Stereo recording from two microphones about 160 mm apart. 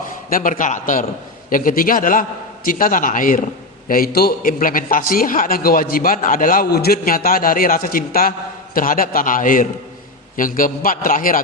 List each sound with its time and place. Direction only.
0.3 s a man's voice: 60° left (ahead or behind)